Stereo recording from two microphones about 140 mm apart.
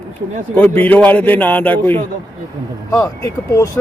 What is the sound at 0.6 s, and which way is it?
A man's voice, 10° left (ahead or behind).